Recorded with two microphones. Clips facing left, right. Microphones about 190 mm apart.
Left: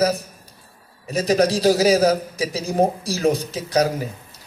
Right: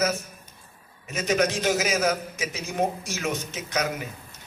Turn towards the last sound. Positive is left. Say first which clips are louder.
# left 7 dB
turn(degrees=35)  # may be behind; listen again after turning